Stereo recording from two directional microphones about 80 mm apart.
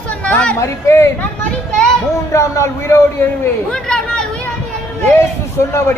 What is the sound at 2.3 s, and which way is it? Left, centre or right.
Speech, left.